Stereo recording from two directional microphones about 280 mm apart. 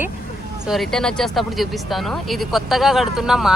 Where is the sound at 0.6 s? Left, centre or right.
Centre.